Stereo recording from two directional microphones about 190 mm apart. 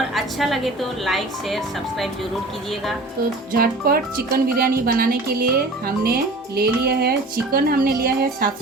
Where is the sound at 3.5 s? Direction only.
50° right (ahead or behind).